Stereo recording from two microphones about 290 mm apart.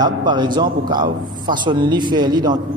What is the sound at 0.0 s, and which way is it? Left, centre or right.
A man's voice, centre.